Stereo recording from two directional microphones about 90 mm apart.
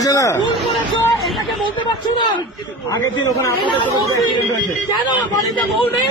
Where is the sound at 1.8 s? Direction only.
60° left (ahead or behind).